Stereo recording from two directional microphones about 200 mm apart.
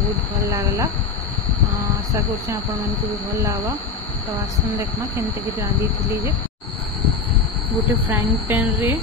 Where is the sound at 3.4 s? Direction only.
10° right (ahead or behind).